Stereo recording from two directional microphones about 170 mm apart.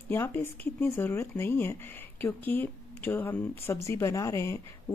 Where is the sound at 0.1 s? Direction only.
10° left (ahead or behind).